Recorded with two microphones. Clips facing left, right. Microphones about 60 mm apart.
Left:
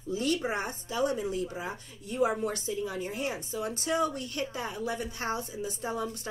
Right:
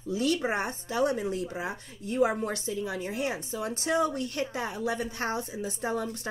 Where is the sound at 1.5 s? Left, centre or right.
Right.